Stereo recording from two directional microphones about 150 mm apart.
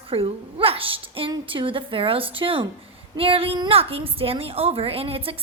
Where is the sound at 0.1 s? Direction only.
40° right (ahead or behind).